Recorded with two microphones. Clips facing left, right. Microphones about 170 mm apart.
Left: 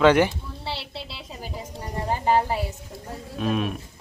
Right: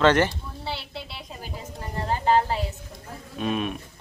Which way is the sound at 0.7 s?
30° left (ahead or behind).